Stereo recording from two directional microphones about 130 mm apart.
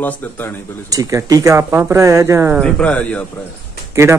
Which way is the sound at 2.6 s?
10° left (ahead or behind).